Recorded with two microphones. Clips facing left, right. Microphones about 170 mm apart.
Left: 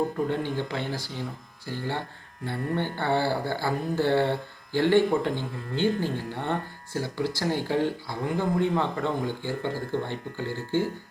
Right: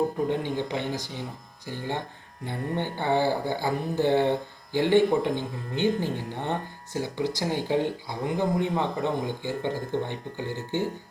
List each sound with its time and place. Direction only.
0.3 s speech: 15° right (ahead or behind)